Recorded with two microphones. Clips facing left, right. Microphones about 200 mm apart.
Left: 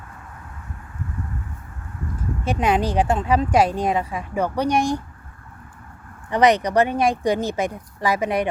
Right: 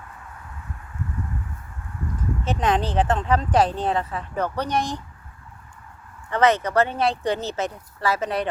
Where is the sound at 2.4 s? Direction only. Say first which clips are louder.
Left 3 dB; 10° left (ahead or behind).